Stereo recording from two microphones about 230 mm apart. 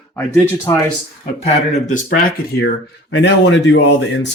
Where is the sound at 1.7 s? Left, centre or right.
Left.